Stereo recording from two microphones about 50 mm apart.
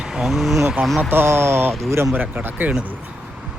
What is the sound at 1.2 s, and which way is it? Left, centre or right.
Speech, right.